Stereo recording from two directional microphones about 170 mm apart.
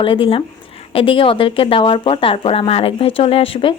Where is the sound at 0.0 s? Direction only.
30° left (ahead or behind).